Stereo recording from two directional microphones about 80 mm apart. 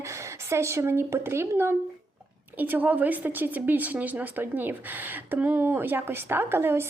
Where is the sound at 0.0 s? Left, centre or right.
Right.